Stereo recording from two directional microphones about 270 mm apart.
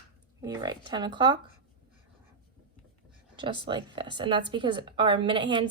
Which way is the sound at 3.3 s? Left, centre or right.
Centre.